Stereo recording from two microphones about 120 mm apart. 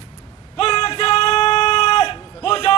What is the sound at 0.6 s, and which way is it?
Music, 55° left (ahead or behind).